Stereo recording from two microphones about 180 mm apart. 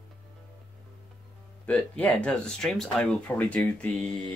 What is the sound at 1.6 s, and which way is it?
Speech, 5° left (ahead or behind).